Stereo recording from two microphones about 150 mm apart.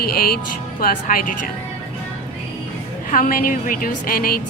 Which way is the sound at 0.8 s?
70° left (ahead or behind).